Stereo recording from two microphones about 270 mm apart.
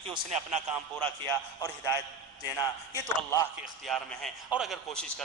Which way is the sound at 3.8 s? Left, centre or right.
Centre.